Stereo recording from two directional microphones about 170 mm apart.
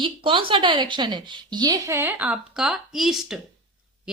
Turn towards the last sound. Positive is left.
turn(degrees=0)  # may be behind; listen again after turning